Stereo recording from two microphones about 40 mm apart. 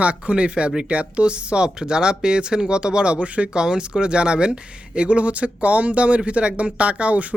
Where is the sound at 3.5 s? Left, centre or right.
Right.